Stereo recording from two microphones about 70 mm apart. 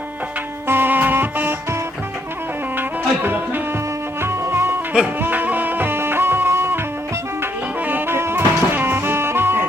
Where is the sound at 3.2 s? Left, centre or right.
Right.